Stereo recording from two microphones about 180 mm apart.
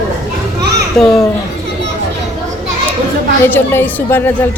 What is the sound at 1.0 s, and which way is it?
Speech, centre (ahead or behind).